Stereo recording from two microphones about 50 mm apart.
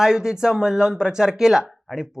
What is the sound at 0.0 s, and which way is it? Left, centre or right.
Speech, centre.